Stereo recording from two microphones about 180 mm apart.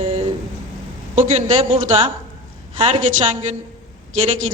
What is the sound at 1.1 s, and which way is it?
Speech, 45° right (ahead or behind).